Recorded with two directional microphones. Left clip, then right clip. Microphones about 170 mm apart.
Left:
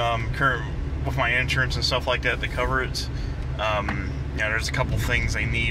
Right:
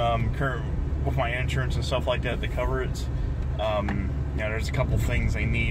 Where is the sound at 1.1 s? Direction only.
10° right (ahead or behind).